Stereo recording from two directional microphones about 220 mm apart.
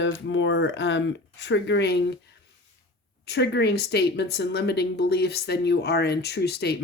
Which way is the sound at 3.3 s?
50° left (ahead or behind).